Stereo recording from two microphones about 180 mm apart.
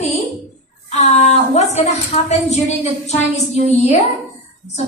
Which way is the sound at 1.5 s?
35° left (ahead or behind).